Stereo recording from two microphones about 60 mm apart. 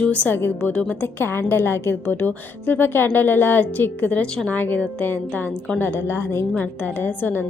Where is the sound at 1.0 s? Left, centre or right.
Left.